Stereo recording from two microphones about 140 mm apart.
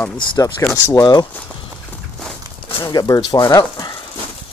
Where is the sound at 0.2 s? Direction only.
35° left (ahead or behind).